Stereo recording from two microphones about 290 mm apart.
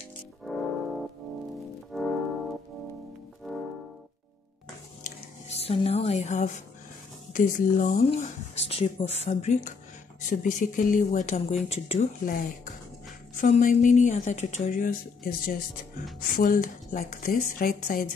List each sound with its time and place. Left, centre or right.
1.9 s music: centre
5.6 s speech: left